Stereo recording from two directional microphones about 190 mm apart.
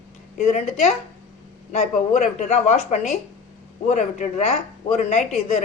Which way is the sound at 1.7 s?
45° left (ahead or behind).